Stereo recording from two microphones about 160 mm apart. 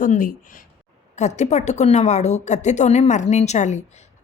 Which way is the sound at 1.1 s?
45° left (ahead or behind).